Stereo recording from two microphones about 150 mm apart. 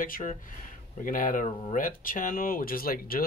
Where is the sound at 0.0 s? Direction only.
65° left (ahead or behind).